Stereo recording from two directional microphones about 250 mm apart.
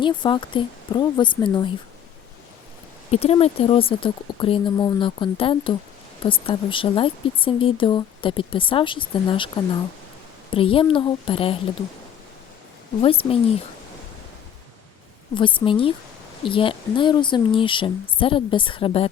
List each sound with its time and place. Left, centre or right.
0.0 s speech: centre
3.1 s speech: left
10.5 s speech: left
13.0 s speech: left
15.4 s speech: centre